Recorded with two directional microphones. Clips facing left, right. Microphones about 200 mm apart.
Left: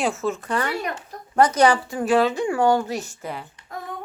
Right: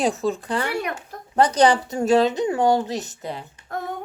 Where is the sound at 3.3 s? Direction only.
25° right (ahead or behind).